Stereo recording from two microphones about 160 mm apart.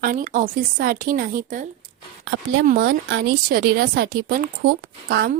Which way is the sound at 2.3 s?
75° right (ahead or behind).